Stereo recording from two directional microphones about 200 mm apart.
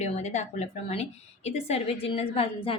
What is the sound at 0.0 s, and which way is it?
A woman's voice, 35° left (ahead or behind).